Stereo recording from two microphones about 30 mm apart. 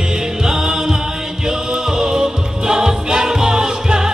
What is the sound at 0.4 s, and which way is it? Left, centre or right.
Music, right.